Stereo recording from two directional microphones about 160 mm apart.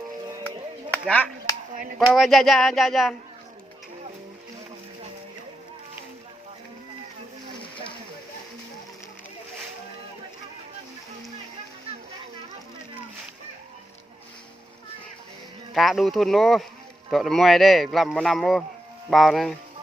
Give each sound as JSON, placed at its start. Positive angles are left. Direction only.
{"t": 1.0, "sound": "speech", "side_deg": 10}
{"t": 1.7, "sound": "a sound", "side_deg": -55}
{"t": 2.1, "sound": "speech", "side_deg": 0}
{"t": 15.7, "sound": "speech", "side_deg": 0}